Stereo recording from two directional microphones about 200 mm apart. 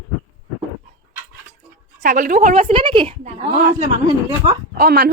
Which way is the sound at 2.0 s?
40° right (ahead or behind).